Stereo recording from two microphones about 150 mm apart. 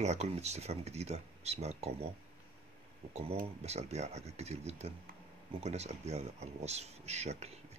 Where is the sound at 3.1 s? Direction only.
45° right (ahead or behind).